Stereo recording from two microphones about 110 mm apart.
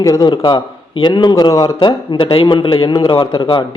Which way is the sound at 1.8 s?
45° left (ahead or behind).